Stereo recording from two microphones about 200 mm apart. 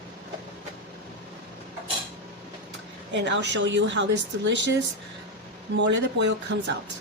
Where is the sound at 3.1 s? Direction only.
60° right (ahead or behind).